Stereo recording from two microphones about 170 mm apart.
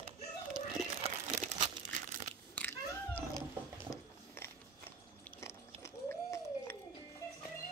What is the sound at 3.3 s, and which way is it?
Cat, 25° left (ahead or behind).